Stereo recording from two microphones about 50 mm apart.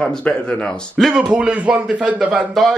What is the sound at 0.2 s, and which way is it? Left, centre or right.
Speech, left.